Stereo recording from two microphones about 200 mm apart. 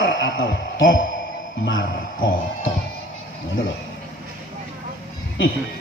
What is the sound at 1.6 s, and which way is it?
Speech, 75° left (ahead or behind).